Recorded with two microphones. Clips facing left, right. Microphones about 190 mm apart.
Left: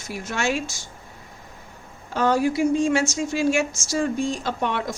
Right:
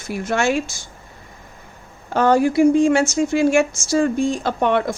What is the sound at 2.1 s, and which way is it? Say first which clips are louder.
A woman's voice: right 5 dB; 60° right (ahead or behind).